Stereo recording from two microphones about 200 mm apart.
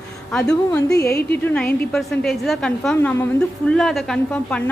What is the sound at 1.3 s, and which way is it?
A woman's voice, 10° left (ahead or behind).